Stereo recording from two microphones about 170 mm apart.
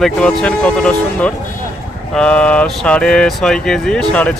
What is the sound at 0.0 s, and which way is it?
Speech, 5° left (ahead or behind).